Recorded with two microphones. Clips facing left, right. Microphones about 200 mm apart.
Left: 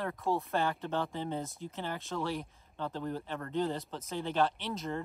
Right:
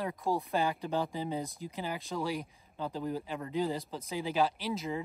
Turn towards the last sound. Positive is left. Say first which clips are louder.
# right 2 dB
turn(degrees=0)  # may be behind; listen again after turning